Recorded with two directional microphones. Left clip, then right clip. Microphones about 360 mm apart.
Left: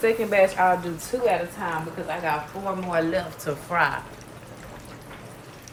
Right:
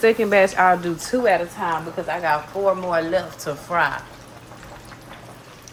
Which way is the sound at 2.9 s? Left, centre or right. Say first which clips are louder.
Right 3 dB; centre.